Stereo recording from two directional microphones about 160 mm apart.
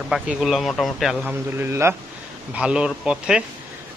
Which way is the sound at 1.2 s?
15° right (ahead or behind).